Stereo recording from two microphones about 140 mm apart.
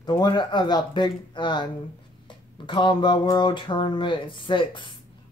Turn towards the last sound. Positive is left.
turn(degrees=35)  # may be behind; listen again after turning